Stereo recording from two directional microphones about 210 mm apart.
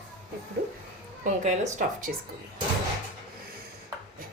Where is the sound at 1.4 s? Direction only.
35° right (ahead or behind).